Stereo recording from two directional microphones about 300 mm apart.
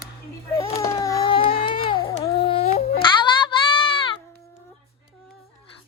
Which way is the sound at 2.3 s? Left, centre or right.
Centre.